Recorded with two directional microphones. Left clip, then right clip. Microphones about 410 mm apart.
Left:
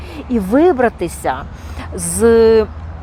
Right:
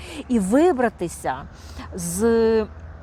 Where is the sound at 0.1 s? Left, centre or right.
Right.